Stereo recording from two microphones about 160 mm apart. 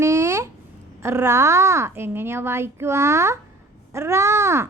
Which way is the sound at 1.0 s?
15° right (ahead or behind).